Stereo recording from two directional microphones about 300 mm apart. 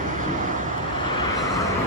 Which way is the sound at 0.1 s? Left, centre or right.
Right.